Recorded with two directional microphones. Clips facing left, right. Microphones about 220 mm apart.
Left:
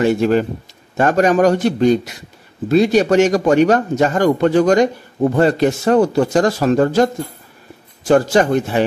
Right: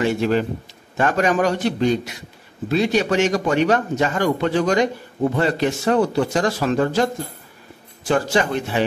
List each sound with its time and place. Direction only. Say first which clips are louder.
0.0 s a man's voice: left 5 dB; 45° left (ahead or behind)
8.1 s a man's voice: left 6 dB; 45° left (ahead or behind)